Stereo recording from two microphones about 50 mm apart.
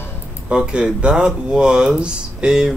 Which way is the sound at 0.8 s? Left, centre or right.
Right.